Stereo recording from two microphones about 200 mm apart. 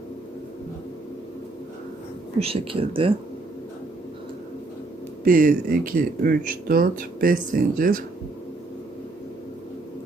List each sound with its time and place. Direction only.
2.4 s speech: 30° right (ahead or behind)
5.2 s speech: 45° right (ahead or behind)